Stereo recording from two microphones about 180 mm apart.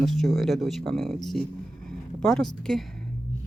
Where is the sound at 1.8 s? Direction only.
5° left (ahead or behind).